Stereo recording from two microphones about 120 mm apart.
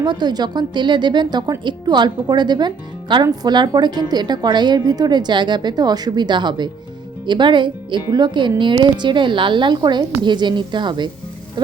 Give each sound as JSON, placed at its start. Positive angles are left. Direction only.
{"t": 0.0, "sound": "a woman's voice", "side_deg": -35}